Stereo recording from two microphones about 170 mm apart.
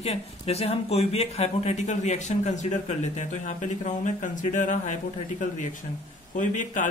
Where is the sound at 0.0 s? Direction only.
35° left (ahead or behind).